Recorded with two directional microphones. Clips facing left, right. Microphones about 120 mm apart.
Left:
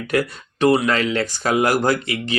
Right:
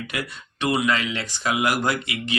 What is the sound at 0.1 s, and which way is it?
Speech, 40° left (ahead or behind).